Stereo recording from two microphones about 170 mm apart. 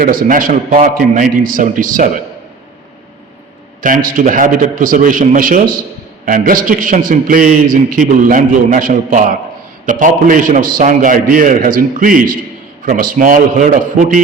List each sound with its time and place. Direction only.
0.0 s a man's voice: 55° right (ahead or behind)
3.8 s a man's voice: 50° right (ahead or behind)